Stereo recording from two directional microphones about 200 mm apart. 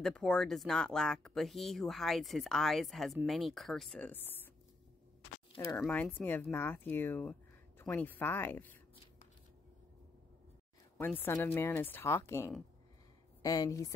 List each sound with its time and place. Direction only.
0.0 s speech: 5° left (ahead or behind)
5.6 s speech: 15° left (ahead or behind)
11.0 s speech: 10° left (ahead or behind)